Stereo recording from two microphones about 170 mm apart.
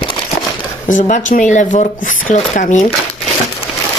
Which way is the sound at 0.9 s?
50° left (ahead or behind).